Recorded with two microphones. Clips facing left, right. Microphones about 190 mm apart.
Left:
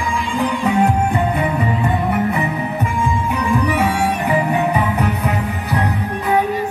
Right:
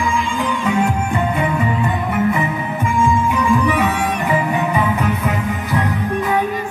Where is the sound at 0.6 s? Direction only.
35° left (ahead or behind).